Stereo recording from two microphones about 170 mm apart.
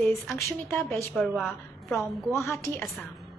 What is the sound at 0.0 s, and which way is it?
A woman's voice, 15° left (ahead or behind).